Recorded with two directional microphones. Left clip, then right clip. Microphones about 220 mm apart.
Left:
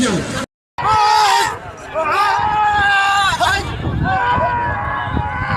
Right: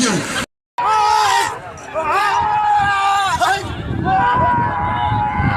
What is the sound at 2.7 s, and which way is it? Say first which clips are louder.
Hubbub: left 1 dB; 20° left (ahead or behind).